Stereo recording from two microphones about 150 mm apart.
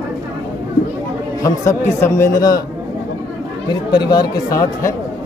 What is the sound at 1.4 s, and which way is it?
Speech, 20° left (ahead or behind).